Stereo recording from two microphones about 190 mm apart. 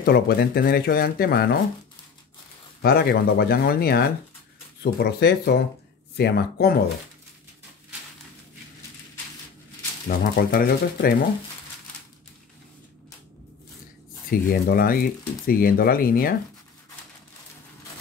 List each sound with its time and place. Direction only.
0.0 s speech: 55° left (ahead or behind)
2.8 s speech: 55° left (ahead or behind)
10.0 s speech: 50° left (ahead or behind)
14.3 s speech: 50° left (ahead or behind)